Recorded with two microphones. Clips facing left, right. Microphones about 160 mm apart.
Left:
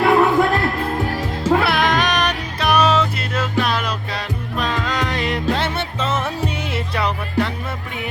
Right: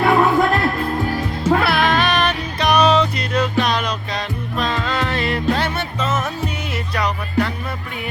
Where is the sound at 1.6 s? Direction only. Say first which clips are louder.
Right 1 dB; 20° left (ahead or behind).